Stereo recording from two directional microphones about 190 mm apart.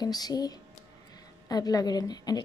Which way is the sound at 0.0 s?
20° left (ahead or behind).